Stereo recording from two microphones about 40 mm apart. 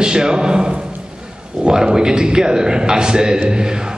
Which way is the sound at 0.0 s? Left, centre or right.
Centre.